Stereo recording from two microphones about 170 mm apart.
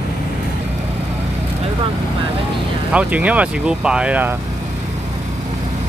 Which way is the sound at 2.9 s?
10° right (ahead or behind).